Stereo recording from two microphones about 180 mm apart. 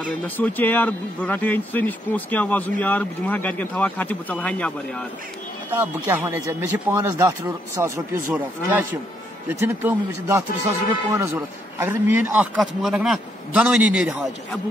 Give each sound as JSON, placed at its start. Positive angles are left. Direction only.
{"t": 0.4, "sound": "speech", "side_deg": 10}
{"t": 5.7, "sound": "a man's voice", "side_deg": -10}